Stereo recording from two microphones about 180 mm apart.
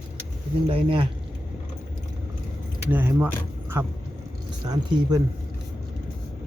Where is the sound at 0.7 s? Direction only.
30° right (ahead or behind).